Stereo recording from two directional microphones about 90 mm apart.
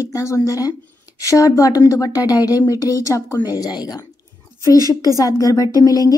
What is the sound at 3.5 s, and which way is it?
Speech, 45° left (ahead or behind).